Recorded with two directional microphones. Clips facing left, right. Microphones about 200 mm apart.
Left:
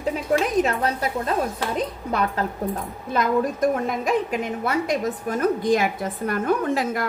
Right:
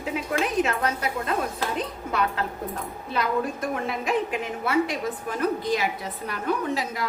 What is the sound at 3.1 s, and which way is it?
A woman's voice, 45° left (ahead or behind).